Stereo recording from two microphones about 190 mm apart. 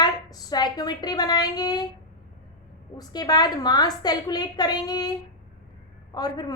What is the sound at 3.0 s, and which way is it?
A woman's voice, 20° left (ahead or behind).